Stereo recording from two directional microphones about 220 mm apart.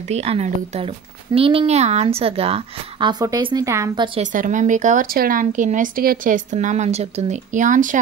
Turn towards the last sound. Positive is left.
turn(degrees=-35)  # may be behind; listen again after turning